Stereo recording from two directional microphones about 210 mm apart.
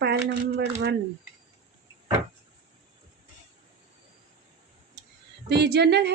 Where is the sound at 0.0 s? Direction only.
50° right (ahead or behind).